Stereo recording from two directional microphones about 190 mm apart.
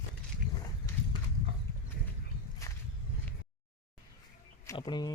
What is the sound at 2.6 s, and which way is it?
Walk, 15° left (ahead or behind).